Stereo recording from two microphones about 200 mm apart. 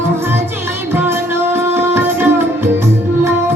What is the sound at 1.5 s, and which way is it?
Music, 10° right (ahead or behind).